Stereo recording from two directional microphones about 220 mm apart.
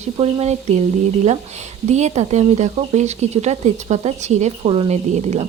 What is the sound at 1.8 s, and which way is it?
Speech, 30° right (ahead or behind).